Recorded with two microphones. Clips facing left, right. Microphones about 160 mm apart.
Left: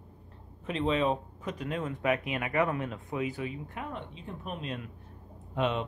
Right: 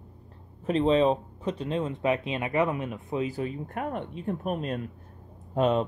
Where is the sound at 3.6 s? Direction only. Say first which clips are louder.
Right 7 dB; 55° right (ahead or behind).